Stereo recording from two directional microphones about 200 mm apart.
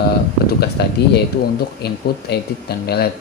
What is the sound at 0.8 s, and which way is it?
Speech, 55° left (ahead or behind).